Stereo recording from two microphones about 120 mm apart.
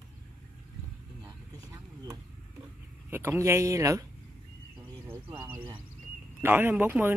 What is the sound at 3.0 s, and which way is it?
Speech, 20° right (ahead or behind).